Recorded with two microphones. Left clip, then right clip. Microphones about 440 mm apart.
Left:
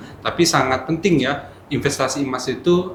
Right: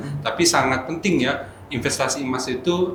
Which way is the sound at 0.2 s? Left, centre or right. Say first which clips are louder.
Left 1 dB; left.